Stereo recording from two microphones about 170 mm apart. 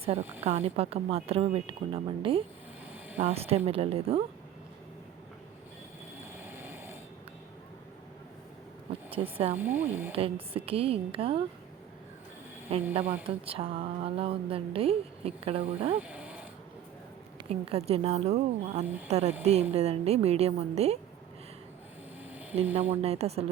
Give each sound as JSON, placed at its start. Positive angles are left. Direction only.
{"t": 0.0, "sound": "speech", "side_deg": -35}
{"t": 6.4, "sound": "snoring", "side_deg": -15}
{"t": 9.1, "sound": "speech", "side_deg": -35}
{"t": 9.6, "sound": "speech", "side_deg": -10}
{"t": 10.2, "sound": "speech", "side_deg": -35}
{"t": 12.9, "sound": "speech", "side_deg": -35}
{"t": 16.0, "sound": "snoring", "side_deg": -5}
{"t": 17.5, "sound": "speech", "side_deg": -35}
{"t": 22.7, "sound": "speech", "side_deg": -40}